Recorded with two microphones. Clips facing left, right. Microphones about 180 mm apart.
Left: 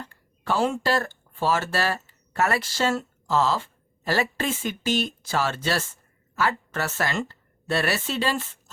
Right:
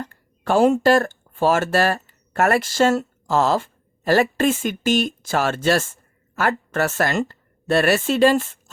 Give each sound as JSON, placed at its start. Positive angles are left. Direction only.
{"t": 0.0, "sound": "a woman's voice", "side_deg": -50}